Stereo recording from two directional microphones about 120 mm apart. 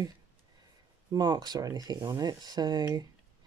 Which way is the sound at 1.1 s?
35° right (ahead or behind).